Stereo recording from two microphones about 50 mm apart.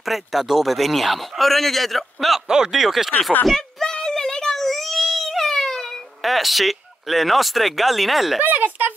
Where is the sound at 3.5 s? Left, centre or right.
Centre.